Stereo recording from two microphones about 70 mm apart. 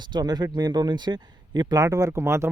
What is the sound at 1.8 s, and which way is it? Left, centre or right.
Speech, right.